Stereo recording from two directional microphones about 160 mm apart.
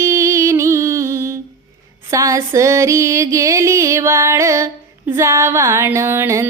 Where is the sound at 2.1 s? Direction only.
20° right (ahead or behind).